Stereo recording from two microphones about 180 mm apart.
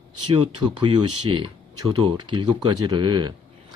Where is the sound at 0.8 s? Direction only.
25° right (ahead or behind).